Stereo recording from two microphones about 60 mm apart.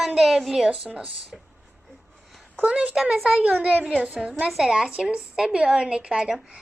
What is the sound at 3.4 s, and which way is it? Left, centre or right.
A woman's voice, right.